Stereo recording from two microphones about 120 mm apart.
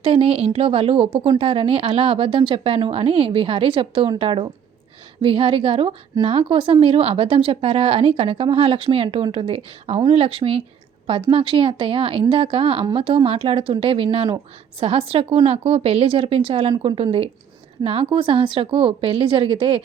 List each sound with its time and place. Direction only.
0.0 s speech: 50° right (ahead or behind)